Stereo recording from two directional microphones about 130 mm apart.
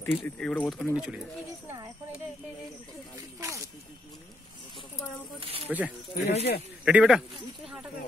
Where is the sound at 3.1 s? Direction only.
25° right (ahead or behind).